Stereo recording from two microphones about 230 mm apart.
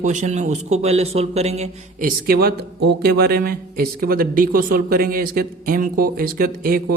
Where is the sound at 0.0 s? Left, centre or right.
Right.